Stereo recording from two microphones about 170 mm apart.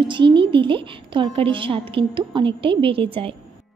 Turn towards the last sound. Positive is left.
turn(degrees=-35)  # may be behind; listen again after turning